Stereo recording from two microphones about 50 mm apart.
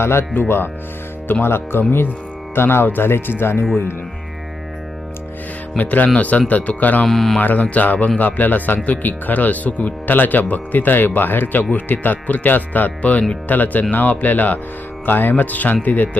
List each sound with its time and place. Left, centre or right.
0.0 s speech: left
5.7 s speech: left
7.0 s speech: centre
7.3 s speech: left